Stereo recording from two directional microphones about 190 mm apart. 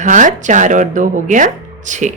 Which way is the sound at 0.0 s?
40° right (ahead or behind).